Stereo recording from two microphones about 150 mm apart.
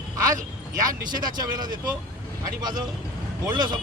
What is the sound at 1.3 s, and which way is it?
Speech, 30° right (ahead or behind).